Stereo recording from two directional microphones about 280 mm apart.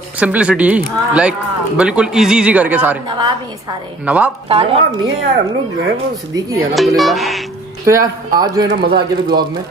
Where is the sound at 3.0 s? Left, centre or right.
Centre.